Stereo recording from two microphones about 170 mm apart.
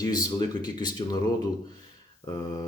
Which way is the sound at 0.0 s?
25° left (ahead or behind).